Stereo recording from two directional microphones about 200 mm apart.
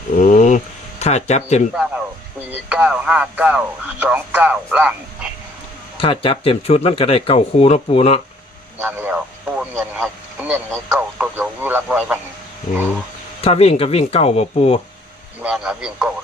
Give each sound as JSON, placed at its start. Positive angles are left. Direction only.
{"t": 0.2, "sound": "a sound", "side_deg": 40}
{"t": 2.5, "sound": "speech", "side_deg": -5}
{"t": 6.0, "sound": "speech", "side_deg": 25}
{"t": 8.8, "sound": "speech", "side_deg": -10}
{"t": 13.4, "sound": "speech", "side_deg": 30}
{"t": 15.4, "sound": "a man's voice", "side_deg": -5}